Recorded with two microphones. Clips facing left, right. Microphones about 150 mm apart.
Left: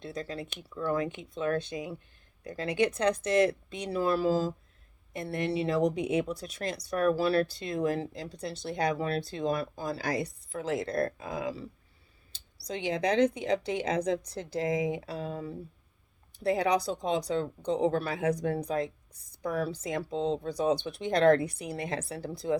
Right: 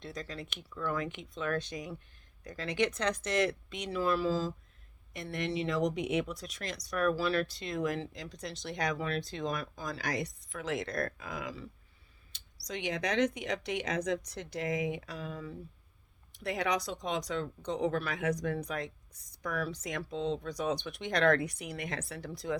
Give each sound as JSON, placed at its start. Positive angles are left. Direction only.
{"t": 0.0, "sound": "speech", "side_deg": 30}
{"t": 4.3, "sound": "speech", "side_deg": 50}
{"t": 5.2, "sound": "speech", "side_deg": 35}